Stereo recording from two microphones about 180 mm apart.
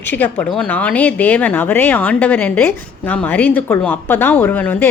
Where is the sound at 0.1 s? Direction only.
10° left (ahead or behind).